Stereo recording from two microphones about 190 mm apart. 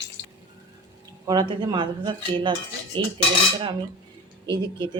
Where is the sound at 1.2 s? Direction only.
25° right (ahead or behind).